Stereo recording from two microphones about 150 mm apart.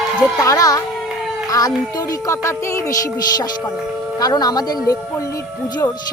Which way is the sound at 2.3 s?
20° left (ahead or behind).